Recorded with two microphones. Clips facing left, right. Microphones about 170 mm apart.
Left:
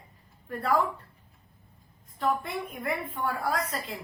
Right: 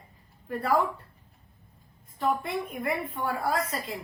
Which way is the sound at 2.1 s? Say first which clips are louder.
Right 1 dB; centre (ahead or behind).